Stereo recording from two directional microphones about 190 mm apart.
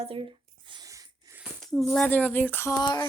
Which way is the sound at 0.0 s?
30° right (ahead or behind).